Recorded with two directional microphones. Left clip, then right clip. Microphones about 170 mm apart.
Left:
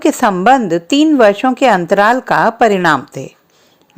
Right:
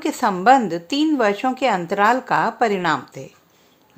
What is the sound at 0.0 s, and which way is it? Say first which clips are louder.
Speech: left 7 dB; 40° left (ahead or behind).